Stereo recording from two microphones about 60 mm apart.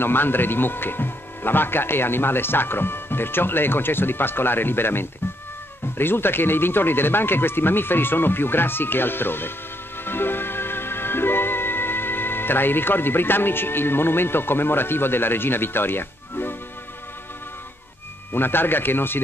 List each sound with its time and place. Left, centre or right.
0.0 s speech: left
10.0 s music: left
18.3 s speech: left